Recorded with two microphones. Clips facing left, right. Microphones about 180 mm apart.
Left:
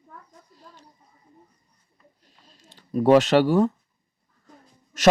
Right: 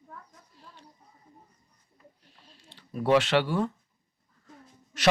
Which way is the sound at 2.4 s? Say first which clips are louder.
Left 1 dB; 40° left (ahead or behind).